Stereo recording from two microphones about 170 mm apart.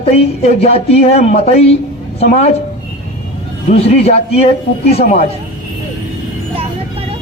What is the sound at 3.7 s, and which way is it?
Speech, 35° left (ahead or behind).